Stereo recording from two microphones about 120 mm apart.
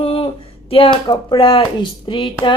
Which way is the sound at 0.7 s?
45° left (ahead or behind).